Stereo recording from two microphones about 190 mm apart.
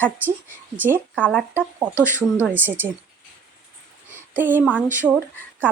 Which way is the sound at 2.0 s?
10° right (ahead or behind).